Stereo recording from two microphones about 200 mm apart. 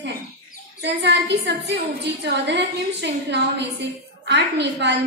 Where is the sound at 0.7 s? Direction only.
55° right (ahead or behind).